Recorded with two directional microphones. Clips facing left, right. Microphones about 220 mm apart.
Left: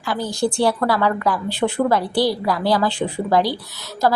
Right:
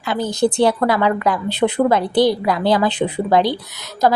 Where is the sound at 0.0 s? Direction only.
20° right (ahead or behind).